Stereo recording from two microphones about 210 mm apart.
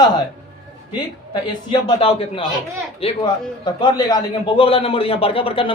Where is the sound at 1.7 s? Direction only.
25° left (ahead or behind).